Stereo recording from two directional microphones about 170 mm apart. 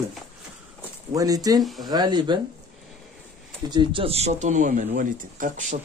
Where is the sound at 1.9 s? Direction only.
25° right (ahead or behind).